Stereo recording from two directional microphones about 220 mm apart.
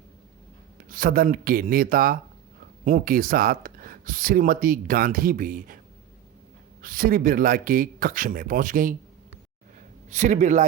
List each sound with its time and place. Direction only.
0.9 s speech: 40° right (ahead or behind)
6.8 s speech: 40° right (ahead or behind)
10.1 s speech: 30° right (ahead or behind)